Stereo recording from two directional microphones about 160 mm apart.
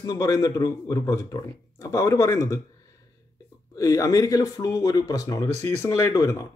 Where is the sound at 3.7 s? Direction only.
20° left (ahead or behind).